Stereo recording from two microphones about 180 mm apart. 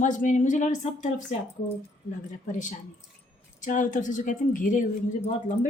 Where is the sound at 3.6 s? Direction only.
45° left (ahead or behind).